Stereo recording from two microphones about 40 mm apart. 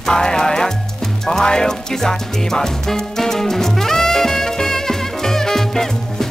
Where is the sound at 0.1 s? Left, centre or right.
Centre.